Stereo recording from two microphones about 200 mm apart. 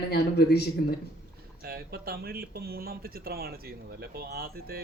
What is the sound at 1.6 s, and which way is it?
Speech, 50° right (ahead or behind).